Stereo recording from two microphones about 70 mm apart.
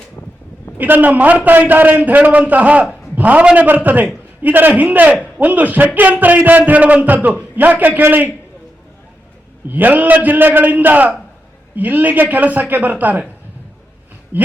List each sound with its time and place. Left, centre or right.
0.8 s a man's voice: right
9.6 s a man's voice: right
14.3 s speech: right